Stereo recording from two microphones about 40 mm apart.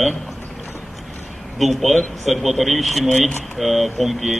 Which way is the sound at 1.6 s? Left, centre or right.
Centre.